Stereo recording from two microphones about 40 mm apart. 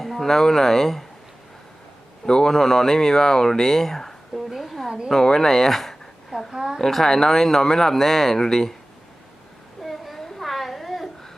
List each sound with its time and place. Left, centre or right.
0.0 s speech: centre
2.2 s speech: centre
2.5 s speech: centre
5.2 s speech: centre
6.5 s a woman's voice: centre
6.7 s speech: centre
9.8 s a sound: centre